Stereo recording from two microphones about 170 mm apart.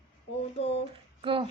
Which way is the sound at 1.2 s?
30° right (ahead or behind).